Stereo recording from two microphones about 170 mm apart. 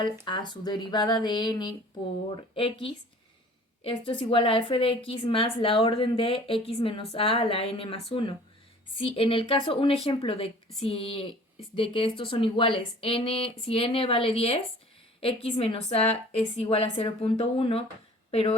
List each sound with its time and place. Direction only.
0.3 s a woman's voice: 25° left (ahead or behind)